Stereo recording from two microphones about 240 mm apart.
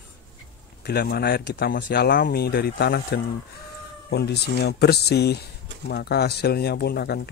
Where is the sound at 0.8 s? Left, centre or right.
Left.